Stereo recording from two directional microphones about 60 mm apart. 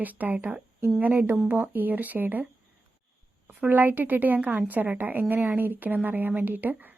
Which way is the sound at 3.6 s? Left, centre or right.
Right.